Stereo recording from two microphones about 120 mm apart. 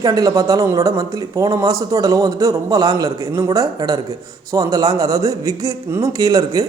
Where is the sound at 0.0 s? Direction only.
30° right (ahead or behind).